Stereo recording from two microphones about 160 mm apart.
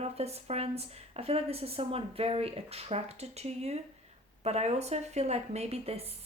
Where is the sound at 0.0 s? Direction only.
40° right (ahead or behind).